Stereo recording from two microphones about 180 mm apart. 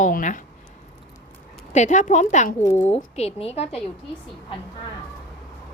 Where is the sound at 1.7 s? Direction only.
40° left (ahead or behind).